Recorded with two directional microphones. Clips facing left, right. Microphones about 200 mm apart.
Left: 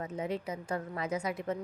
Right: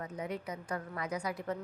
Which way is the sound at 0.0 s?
25° left (ahead or behind).